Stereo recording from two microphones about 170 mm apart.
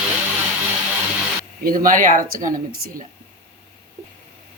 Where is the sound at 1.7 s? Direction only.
55° right (ahead or behind).